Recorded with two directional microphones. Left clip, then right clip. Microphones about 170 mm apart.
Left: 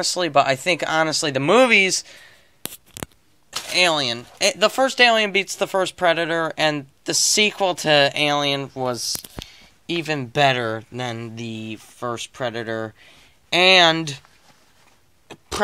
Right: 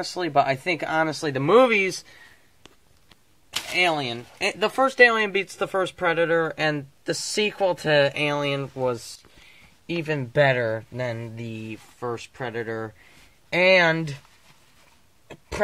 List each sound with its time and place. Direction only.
0.0 s speech: 20° left (ahead or behind)
3.5 s speech: 20° left (ahead or behind)